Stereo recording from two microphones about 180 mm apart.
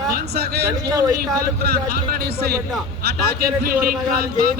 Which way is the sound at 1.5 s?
60° right (ahead or behind).